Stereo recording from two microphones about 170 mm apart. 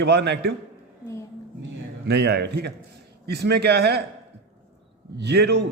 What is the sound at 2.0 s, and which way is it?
A man's voice, 75° right (ahead or behind).